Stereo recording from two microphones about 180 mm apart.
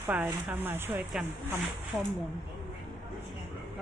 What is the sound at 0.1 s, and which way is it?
Speech, 10° right (ahead or behind).